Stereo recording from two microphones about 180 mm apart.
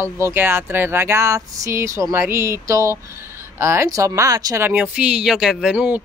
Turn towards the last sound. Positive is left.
turn(degrees=-5)  # may be behind; listen again after turning